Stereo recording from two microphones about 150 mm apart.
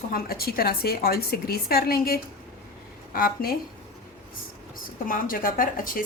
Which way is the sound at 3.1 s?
80° left.